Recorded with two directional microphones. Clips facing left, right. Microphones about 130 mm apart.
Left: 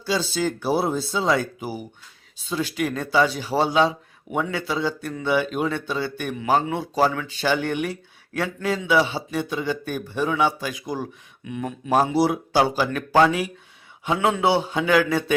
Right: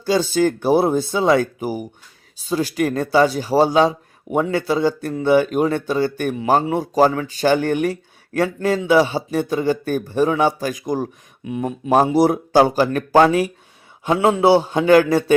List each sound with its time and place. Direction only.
0.0 s a man's voice: 45° right (ahead or behind)